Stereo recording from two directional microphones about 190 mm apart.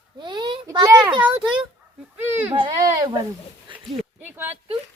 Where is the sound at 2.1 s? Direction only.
10° right (ahead or behind).